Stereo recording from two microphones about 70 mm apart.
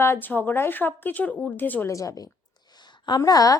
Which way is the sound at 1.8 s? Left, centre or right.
Left.